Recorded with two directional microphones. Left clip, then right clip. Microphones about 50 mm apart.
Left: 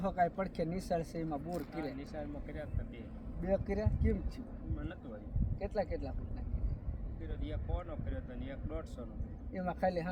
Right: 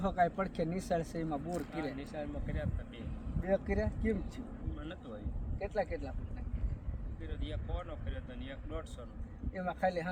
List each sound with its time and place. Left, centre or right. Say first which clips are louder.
0.0 s speech: right 1 dB; centre
2.0 s speech: right 2 dB; right
3.4 s speech: right 2 dB; centre
5.5 s speech: right 1 dB; centre
7.4 s speech: even; right
9.6 s speech: right 1 dB; centre